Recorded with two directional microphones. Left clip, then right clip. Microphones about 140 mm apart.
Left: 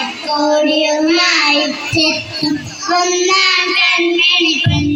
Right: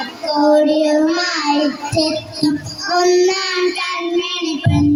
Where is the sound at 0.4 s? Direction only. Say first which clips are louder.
Even; 55° right (ahead or behind).